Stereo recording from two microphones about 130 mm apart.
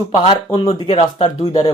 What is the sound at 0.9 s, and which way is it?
Speech, 35° left (ahead or behind).